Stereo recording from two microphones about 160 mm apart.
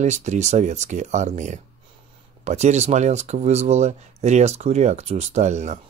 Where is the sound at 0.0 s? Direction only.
45° right (ahead or behind).